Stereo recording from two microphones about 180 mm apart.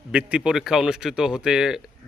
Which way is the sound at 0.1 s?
5° right (ahead or behind).